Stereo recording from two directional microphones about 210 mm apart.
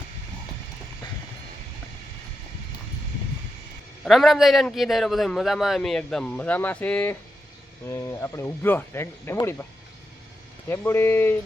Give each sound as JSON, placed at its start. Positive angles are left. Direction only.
{"t": 4.0, "sound": "a man's voice", "side_deg": 0}
{"t": 10.7, "sound": "speech", "side_deg": 10}